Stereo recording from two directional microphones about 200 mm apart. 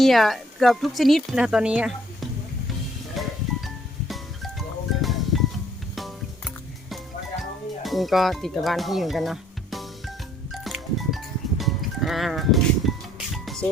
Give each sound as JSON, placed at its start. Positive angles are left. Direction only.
{"t": 0.0, "sound": "speech", "side_deg": 0}
{"t": 3.2, "sound": "music", "side_deg": 0}
{"t": 4.9, "sound": "music", "side_deg": 0}
{"t": 7.8, "sound": "speech", "side_deg": 0}
{"t": 10.5, "sound": "music", "side_deg": 0}